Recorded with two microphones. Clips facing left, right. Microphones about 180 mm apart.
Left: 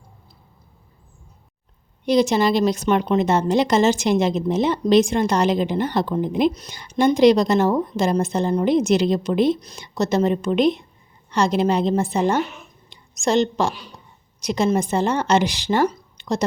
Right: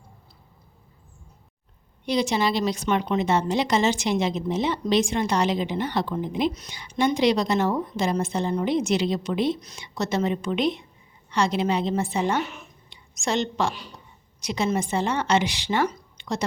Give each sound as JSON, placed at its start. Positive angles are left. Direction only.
{"t": 2.0, "sound": "a woman's voice", "side_deg": 45}